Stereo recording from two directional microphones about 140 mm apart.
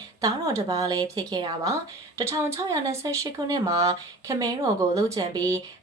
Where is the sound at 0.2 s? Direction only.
25° right (ahead or behind).